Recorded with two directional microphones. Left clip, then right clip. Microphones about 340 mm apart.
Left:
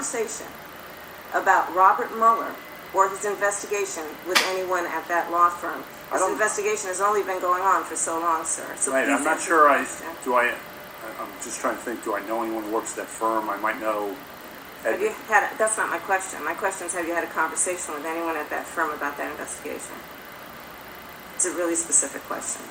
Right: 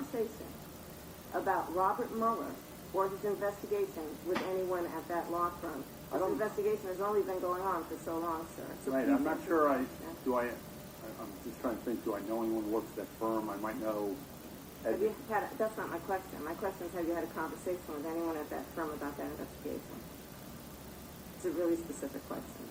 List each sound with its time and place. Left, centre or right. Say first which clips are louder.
1.3 s speech: left 13 dB; centre